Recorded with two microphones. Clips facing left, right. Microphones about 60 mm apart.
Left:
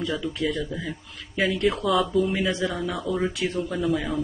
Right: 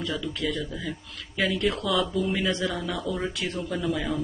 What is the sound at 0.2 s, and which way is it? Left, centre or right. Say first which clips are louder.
Speech: left 3 dB; left.